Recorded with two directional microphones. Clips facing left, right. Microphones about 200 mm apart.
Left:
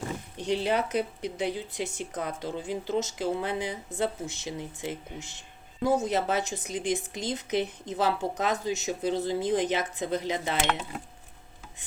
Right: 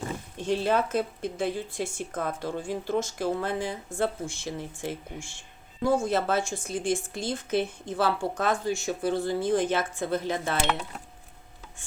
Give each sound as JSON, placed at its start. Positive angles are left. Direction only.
{"t": 0.3, "sound": "speech", "side_deg": 15}